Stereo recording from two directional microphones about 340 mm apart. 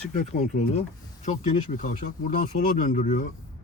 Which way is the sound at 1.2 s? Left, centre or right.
Left.